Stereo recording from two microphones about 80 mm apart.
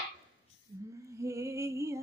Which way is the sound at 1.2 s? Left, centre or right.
Right.